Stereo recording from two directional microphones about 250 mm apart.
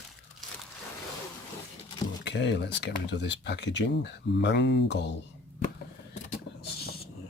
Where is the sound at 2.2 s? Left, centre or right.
Left.